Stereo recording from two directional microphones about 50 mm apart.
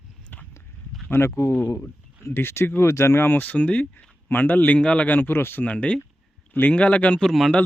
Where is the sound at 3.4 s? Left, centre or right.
Left.